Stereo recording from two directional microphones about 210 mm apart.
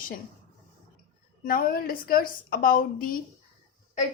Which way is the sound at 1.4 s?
45° left (ahead or behind).